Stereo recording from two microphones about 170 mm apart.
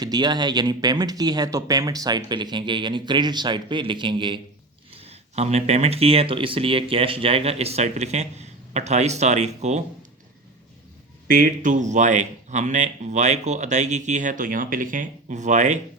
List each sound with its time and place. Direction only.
0.0 s speech: 25° right (ahead or behind); by 9.8 s 40° right (ahead or behind)
11.3 s speech: 55° right (ahead or behind)